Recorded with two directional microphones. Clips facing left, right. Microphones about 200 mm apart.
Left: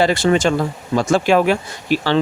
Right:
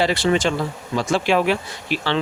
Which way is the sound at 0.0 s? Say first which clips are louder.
Left 4 dB; 45° left (ahead or behind).